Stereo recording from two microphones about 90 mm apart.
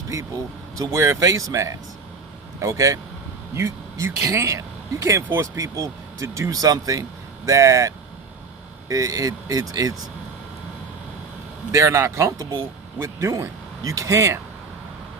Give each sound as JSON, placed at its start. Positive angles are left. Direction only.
{"t": 0.8, "sound": "speech", "side_deg": -30}
{"t": 11.7, "sound": "speech", "side_deg": -35}